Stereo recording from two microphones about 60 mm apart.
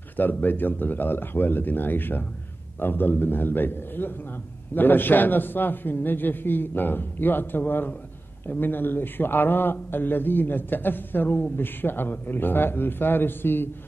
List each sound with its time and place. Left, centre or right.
0.2 s a man's voice: left